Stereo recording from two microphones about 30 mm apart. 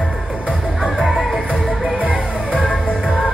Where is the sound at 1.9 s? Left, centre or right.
Right.